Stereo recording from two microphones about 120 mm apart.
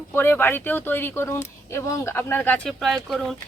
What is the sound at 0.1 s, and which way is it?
Speech, 20° left (ahead or behind).